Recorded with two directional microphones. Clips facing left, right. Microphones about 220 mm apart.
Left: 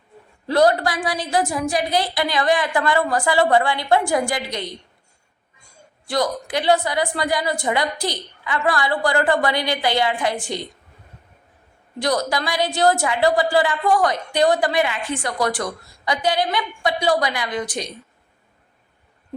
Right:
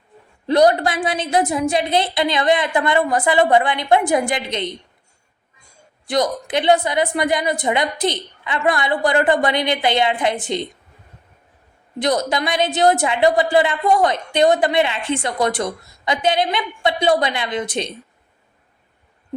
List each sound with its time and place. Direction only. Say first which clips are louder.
0.4 s a woman's voice: right 2 dB; 20° right (ahead or behind)
6.1 s a woman's voice: right 3 dB; 20° right (ahead or behind)
11.9 s a woman's voice: right 2 dB; 20° right (ahead or behind)